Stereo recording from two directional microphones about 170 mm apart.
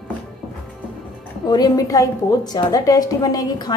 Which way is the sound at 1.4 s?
25° left (ahead or behind).